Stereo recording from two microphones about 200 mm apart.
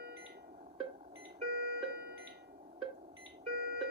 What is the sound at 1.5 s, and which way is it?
Alarm clock, 50° right (ahead or behind).